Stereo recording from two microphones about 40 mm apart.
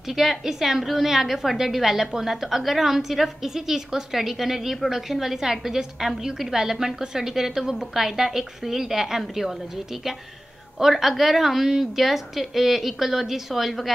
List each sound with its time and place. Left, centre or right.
0.1 s a woman's voice: centre
10.8 s a woman's voice: centre